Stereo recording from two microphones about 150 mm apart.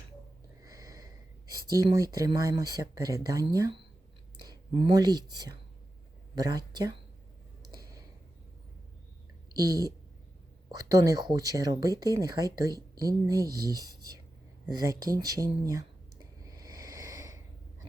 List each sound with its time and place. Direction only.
0.6 s snort: 25° right (ahead or behind)
1.8 s speech: 25° right (ahead or behind)
4.7 s speech: 40° right (ahead or behind)
4.9 s speech: 25° right (ahead or behind)
7.8 s a sound: 25° right (ahead or behind)
10.8 s speech: 25° right (ahead or behind)
16.6 s a sound: 25° right (ahead or behind)